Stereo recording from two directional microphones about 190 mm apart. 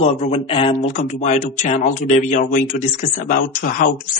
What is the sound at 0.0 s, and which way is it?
Speech, 30° left (ahead or behind).